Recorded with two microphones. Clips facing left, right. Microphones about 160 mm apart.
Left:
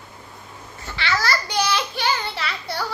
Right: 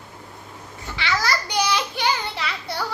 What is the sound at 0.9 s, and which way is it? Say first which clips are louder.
Babbling: left 1 dB; 15° right (ahead or behind).